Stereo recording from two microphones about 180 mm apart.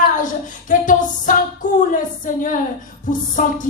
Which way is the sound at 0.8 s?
45° left (ahead or behind).